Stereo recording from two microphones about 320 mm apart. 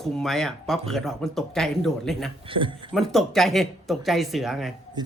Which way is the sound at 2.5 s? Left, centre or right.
Centre.